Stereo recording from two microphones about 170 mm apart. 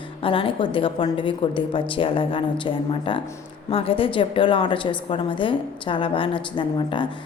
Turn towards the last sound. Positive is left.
turn(degrees=30)  # may be behind; listen again after turning